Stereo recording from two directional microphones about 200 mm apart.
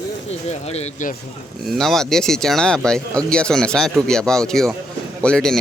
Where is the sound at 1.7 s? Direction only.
Centre (ahead or behind).